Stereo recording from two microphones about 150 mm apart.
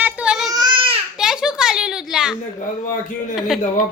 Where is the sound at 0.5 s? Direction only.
25° right (ahead or behind).